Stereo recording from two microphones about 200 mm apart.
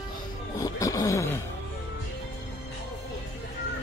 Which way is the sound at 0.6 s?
15° left (ahead or behind).